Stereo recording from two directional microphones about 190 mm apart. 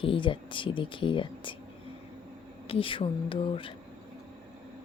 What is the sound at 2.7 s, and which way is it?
Speech, 30° left (ahead or behind).